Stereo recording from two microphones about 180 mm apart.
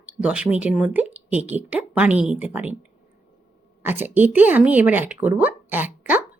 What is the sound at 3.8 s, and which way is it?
Speech, 10° right (ahead or behind).